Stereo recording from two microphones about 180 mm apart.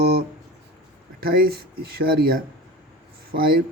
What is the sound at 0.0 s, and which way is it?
Guitar, 60° right (ahead or behind).